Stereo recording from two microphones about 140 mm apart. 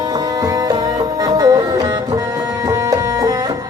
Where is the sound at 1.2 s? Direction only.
25° right (ahead or behind).